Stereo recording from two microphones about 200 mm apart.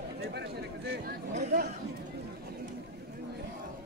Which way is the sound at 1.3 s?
35° right (ahead or behind).